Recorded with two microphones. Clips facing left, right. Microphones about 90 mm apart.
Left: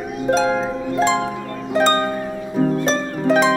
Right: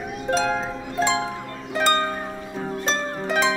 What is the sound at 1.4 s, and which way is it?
Music, 45° left (ahead or behind).